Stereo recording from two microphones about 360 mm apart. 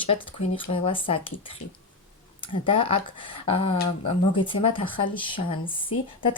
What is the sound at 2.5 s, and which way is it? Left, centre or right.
Speech, centre.